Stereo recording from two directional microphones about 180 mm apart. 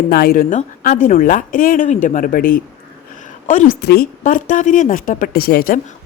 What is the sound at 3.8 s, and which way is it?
A woman's voice, 60° left (ahead or behind).